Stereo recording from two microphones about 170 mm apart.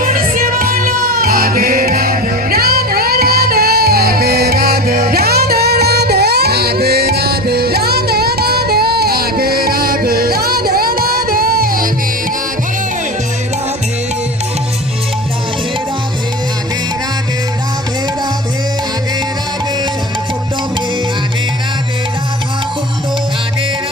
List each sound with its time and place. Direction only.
0.0 s music: 55° right (ahead or behind)